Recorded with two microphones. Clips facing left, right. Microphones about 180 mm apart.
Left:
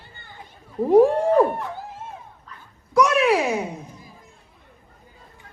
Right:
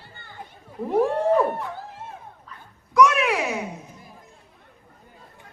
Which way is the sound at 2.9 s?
35° left (ahead or behind).